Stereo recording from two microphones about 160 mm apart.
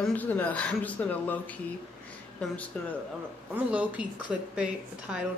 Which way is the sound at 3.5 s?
10° right (ahead or behind).